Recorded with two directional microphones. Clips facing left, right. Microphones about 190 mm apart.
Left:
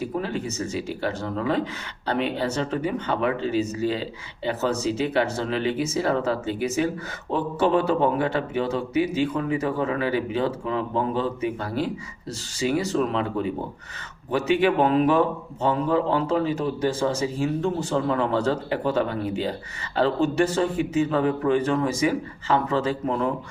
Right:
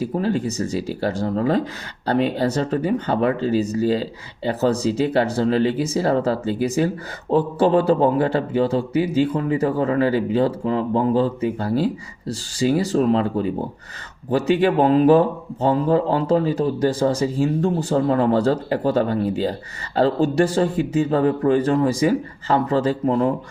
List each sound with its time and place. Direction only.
0.0 s speech: 35° right (ahead or behind)